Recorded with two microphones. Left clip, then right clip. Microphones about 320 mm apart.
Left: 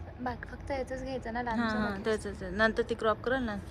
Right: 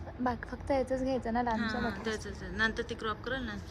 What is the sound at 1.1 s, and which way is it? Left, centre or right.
Speech, right.